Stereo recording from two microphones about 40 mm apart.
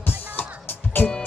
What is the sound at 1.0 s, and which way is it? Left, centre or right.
Music, left.